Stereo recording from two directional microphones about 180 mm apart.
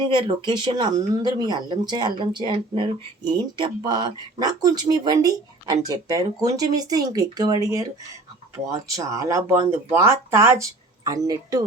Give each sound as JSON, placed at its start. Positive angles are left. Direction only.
{"t": 0.1, "sound": "speech", "side_deg": -25}